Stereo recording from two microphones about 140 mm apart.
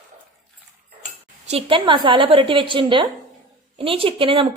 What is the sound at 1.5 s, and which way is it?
A woman's voice, 40° right (ahead or behind).